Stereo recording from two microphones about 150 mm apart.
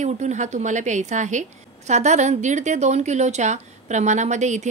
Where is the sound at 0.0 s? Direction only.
55° right (ahead or behind).